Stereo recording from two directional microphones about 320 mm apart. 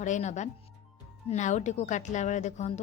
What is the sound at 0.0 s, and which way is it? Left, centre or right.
A woman's voice, left.